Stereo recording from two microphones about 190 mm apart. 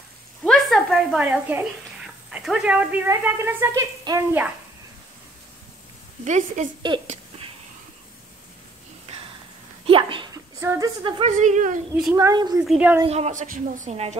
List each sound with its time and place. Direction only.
0.4 s a sound: centre (ahead or behind)
2.3 s a woman's voice: 5° right (ahead or behind)
6.2 s a woman's voice: 40° right (ahead or behind)
7.1 s a sound: 30° right (ahead or behind)
9.8 s dog: 25° right (ahead or behind)
10.6 s speech: 15° right (ahead or behind)
11.2 s a woman's voice: 40° right (ahead or behind)
11.9 s a woman's voice: 10° right (ahead or behind)
12.6 s a woman's voice: 5° right (ahead or behind)
13.0 s a woman's voice: 35° right (ahead or behind)